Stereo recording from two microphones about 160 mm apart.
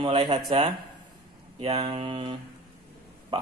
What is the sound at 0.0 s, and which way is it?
Speech, 30° right (ahead or behind).